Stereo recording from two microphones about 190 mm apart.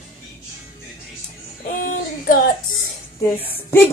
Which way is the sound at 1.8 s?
45° left (ahead or behind).